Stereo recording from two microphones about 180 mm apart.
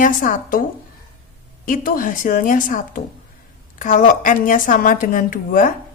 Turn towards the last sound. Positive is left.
turn(degrees=50)  # may be behind; listen again after turning